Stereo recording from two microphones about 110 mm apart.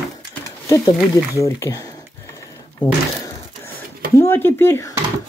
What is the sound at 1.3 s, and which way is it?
Speech, 30° left (ahead or behind).